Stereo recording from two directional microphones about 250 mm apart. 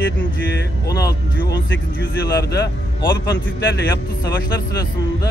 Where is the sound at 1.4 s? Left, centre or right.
Left.